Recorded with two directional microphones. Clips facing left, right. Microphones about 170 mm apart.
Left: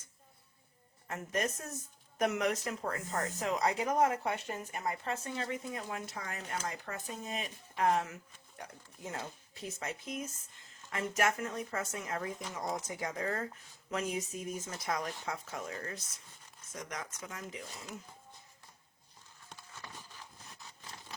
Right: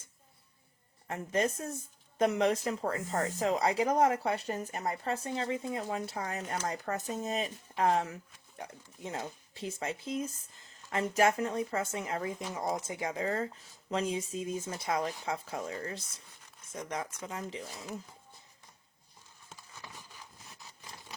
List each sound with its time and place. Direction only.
1.0 s speech: 25° right (ahead or behind)
8.5 s speech: 20° right (ahead or behind)